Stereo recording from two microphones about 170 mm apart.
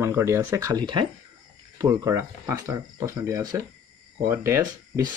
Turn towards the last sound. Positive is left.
turn(degrees=-15)  # may be behind; listen again after turning